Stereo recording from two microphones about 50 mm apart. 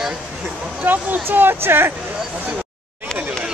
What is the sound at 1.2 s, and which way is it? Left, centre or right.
Speech, right.